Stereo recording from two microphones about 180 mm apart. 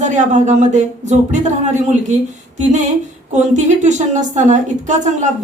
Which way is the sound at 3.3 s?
40° right (ahead or behind).